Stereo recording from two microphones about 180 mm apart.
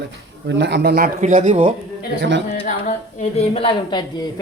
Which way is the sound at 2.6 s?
35° left (ahead or behind).